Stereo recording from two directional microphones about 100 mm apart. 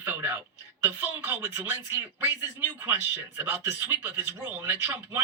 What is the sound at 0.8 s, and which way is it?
Speech, 20° right (ahead or behind).